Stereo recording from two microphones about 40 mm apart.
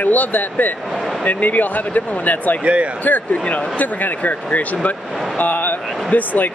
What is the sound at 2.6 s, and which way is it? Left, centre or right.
Speech, right.